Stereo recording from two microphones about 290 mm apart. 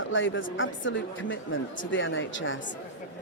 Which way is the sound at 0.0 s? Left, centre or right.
Left.